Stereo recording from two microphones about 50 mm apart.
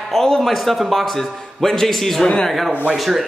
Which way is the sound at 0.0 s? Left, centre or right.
Centre.